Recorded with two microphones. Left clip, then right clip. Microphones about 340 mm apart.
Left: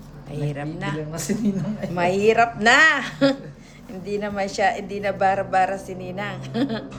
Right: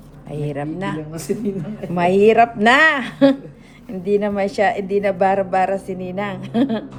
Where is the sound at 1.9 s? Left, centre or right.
Centre.